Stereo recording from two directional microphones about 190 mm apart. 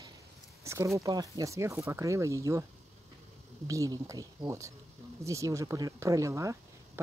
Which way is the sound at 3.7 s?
15° right (ahead or behind).